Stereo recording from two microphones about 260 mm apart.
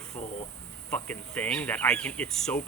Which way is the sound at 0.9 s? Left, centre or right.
Centre.